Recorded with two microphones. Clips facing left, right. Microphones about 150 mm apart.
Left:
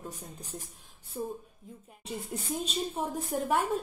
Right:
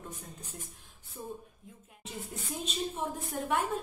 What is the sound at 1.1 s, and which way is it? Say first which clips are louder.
Speech: left 7 dB; 30° left (ahead or behind).